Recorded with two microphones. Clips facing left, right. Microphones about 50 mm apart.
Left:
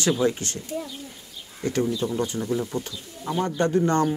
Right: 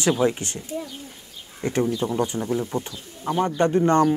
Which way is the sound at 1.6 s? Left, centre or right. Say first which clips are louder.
Right 1 dB; right.